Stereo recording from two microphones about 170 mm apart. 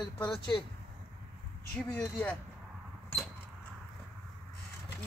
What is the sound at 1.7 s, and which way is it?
Speech, 10° left (ahead or behind).